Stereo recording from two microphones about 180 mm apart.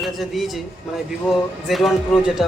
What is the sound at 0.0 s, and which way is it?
Speech, centre (ahead or behind).